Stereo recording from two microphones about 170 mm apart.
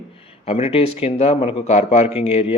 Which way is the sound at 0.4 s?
35° left (ahead or behind).